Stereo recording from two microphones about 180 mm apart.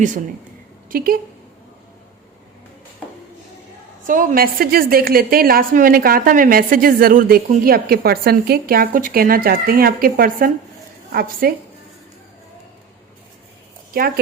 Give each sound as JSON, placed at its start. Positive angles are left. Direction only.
{"t": 0.9, "sound": "speech", "side_deg": -55}
{"t": 4.0, "sound": "a woman's voice", "side_deg": -50}